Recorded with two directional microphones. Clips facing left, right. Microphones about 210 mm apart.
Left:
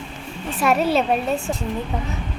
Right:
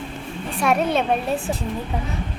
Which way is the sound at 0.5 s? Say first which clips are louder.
Left 1 dB; 5° left (ahead or behind).